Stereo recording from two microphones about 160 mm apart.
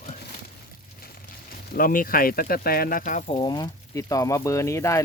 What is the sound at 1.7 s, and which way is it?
Speech, 60° left (ahead or behind).